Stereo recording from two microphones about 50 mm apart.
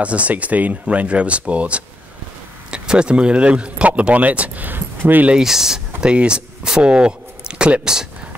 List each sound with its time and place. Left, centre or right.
0.0 s speech: right
5.3 s speech: centre
6.0 s speech: right